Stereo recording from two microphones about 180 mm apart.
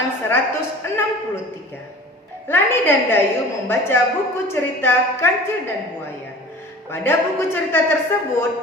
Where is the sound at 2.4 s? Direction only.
10° left (ahead or behind).